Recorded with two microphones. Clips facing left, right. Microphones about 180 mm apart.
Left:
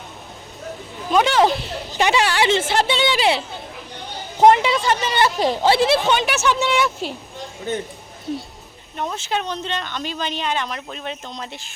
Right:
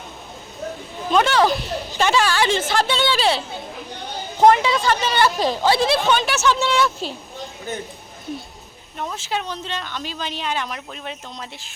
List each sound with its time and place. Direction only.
1.1 s a woman's voice: 20° left (ahead or behind)
9.0 s speech: 5° right (ahead or behind)